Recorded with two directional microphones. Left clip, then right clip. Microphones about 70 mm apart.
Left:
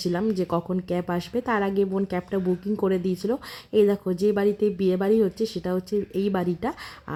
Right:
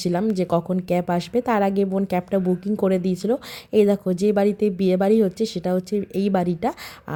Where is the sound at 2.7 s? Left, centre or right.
Right.